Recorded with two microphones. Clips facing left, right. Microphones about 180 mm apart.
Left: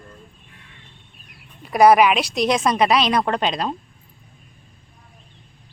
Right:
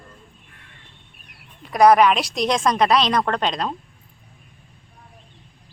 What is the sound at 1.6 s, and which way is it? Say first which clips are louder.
A woman's voice: left 1 dB; 5° left (ahead or behind).